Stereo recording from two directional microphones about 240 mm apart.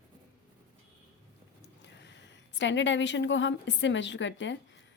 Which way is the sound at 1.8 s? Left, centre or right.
Left.